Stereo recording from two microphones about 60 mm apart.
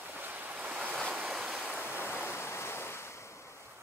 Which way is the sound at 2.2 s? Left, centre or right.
Left.